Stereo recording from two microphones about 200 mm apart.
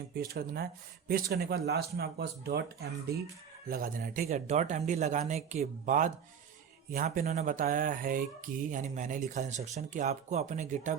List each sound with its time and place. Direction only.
0.2 s speech: 50° right (ahead or behind)
3.7 s speech: 45° right (ahead or behind)